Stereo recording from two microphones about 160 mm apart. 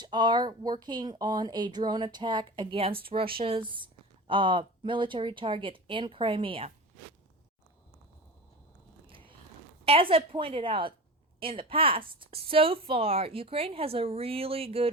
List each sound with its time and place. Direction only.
0.0 s a woman's voice: 25° right (ahead or behind)
9.0 s a sound: 35° right (ahead or behind)
9.8 s a woman's voice: 35° right (ahead or behind)